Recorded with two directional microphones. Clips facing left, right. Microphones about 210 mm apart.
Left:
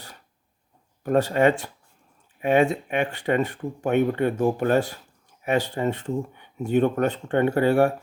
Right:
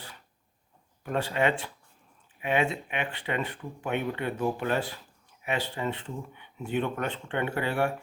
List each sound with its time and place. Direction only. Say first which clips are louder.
1.0 s speech: left 8 dB; 45° left (ahead or behind)